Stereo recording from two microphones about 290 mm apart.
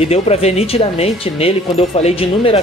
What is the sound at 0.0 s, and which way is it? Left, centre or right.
Speech, left.